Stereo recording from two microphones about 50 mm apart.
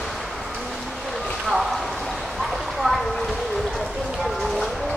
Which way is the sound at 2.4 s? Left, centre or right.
Centre.